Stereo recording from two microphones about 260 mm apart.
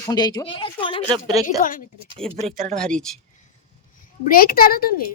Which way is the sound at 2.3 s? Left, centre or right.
Right.